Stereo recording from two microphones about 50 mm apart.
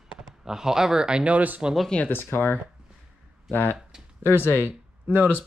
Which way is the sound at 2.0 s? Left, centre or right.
Left.